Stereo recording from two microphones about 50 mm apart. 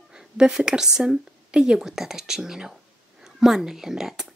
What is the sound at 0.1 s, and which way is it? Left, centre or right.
A woman's voice, centre.